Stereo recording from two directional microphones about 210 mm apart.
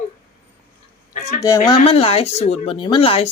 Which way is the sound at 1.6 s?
25° left (ahead or behind).